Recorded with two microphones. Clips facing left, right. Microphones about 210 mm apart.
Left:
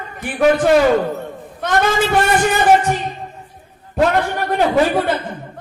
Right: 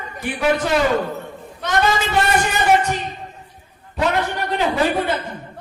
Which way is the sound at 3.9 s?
50° left (ahead or behind).